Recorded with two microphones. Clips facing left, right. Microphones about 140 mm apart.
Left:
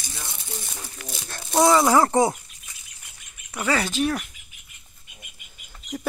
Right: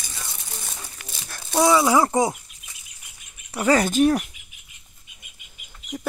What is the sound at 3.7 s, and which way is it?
Speech, 45° right (ahead or behind).